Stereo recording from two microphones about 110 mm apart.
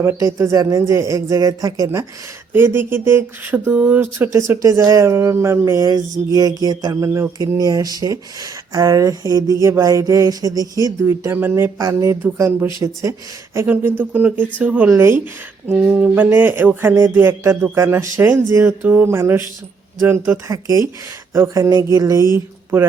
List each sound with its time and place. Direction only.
0.0 s speech: 25° right (ahead or behind)
4.3 s speech: 30° right (ahead or behind)
11.0 s speech: 20° right (ahead or behind)
20.5 s speech: 30° right (ahead or behind)
22.7 s speech: 20° right (ahead or behind)